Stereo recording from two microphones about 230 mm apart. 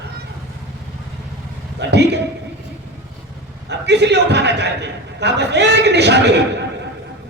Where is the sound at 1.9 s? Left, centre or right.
Right.